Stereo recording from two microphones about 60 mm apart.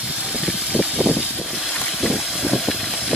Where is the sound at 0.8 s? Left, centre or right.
Centre.